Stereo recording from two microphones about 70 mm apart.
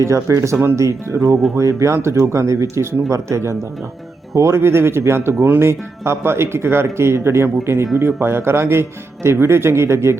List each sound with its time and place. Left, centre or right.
0.0 s speech: right